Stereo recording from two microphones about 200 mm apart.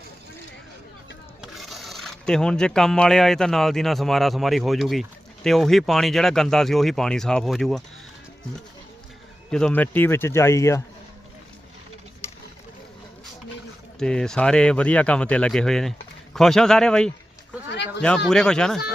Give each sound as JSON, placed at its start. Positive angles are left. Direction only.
{"t": 1.4, "sound": "speech", "side_deg": 0}
{"t": 9.5, "sound": "speech", "side_deg": 5}
{"t": 14.0, "sound": "speech", "side_deg": 5}
{"t": 17.7, "sound": "a sound", "side_deg": 60}
{"t": 18.0, "sound": "speech", "side_deg": 5}